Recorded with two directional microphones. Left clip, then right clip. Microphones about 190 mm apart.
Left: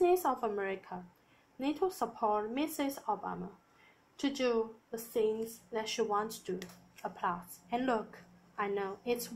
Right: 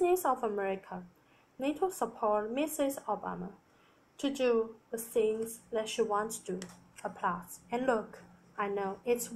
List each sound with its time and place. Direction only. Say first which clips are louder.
0.0 s a woman's voice: even; 25° left (ahead or behind)